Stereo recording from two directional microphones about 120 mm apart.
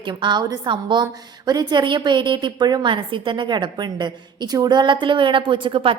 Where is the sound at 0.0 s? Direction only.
40° right (ahead or behind).